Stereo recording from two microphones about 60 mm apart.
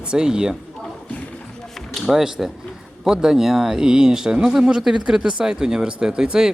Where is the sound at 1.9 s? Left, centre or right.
Centre.